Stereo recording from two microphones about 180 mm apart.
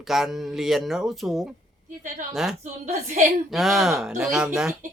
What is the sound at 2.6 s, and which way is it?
Speech, 40° right (ahead or behind).